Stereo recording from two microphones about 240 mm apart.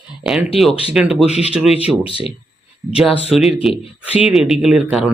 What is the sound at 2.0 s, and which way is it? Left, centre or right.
Speech, left.